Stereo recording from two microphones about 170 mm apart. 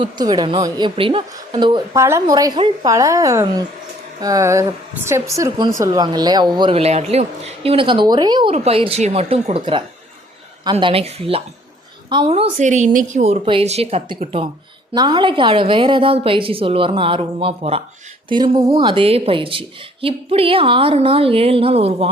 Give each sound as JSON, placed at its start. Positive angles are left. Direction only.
{"t": 0.0, "sound": "a woman's voice", "side_deg": -25}
{"t": 13.2, "sound": "speech", "side_deg": -35}